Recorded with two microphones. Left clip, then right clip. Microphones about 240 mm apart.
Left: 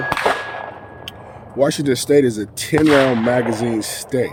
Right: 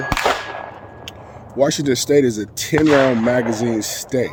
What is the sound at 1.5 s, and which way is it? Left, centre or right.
Speech, centre.